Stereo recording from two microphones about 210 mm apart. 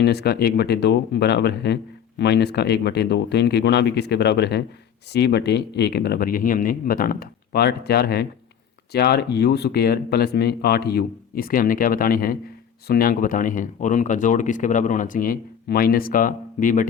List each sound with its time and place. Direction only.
0.0 s speech: 50° left (ahead or behind)